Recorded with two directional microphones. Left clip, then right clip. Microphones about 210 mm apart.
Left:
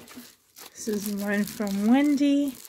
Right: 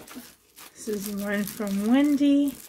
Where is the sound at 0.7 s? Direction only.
40° left (ahead or behind).